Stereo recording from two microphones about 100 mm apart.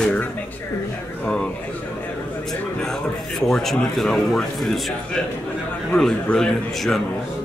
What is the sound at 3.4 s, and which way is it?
Speech, 5° left (ahead or behind).